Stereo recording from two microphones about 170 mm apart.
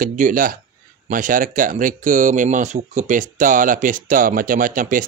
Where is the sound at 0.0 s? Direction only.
55° right (ahead or behind).